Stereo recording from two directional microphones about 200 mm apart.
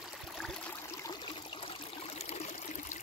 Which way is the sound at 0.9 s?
20° left (ahead or behind).